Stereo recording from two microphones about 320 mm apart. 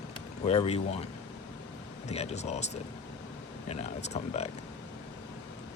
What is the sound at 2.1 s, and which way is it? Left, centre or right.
Speech, left.